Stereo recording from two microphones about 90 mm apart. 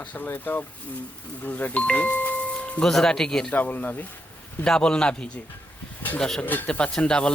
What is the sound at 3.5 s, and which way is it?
Speech, 20° left (ahead or behind).